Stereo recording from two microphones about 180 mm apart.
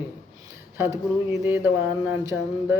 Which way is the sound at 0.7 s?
15° right (ahead or behind).